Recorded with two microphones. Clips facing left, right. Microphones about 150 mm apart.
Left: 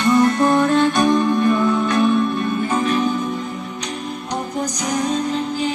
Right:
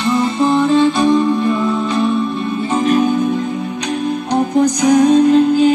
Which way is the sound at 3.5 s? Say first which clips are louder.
Right 8 dB; 90° right.